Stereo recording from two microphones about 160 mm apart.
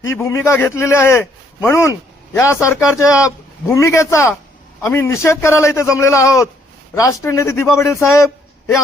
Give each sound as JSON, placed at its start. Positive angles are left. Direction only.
{"t": 0.0, "sound": "a man's voice", "side_deg": 20}